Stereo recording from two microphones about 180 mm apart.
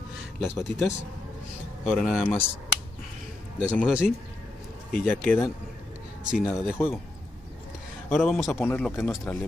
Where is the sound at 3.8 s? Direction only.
5° right (ahead or behind).